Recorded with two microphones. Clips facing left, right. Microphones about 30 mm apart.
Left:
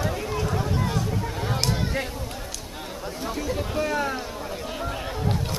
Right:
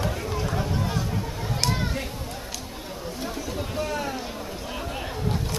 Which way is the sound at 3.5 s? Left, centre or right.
Centre.